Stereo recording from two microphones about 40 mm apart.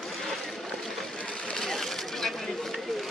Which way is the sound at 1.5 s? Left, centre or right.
Centre.